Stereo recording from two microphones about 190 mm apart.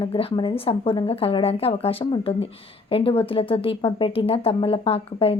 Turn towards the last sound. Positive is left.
turn(degrees=30)  # may be behind; listen again after turning